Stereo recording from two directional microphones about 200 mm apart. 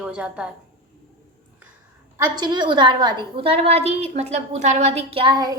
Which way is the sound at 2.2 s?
20° right (ahead or behind).